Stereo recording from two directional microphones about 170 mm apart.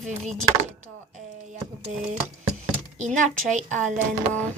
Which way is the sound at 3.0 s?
45° right (ahead or behind).